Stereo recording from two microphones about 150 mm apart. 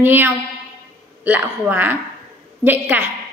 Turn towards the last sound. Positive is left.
turn(degrees=-10)  # may be behind; listen again after turning